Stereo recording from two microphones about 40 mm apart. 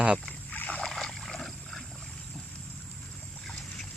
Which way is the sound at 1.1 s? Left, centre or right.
Centre.